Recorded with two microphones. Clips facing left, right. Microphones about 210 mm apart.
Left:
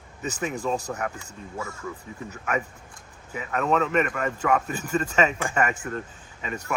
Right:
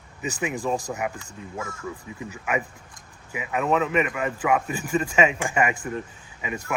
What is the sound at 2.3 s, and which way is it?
Speech, 10° right (ahead or behind).